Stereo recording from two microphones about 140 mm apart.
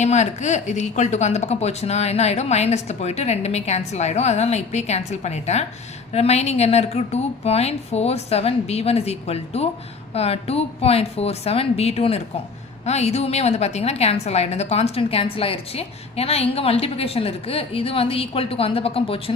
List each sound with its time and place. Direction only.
0.0 s a woman's voice: 55° left (ahead or behind)